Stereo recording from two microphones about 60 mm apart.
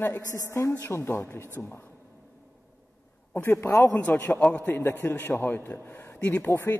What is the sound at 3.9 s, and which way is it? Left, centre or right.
A man's voice, left.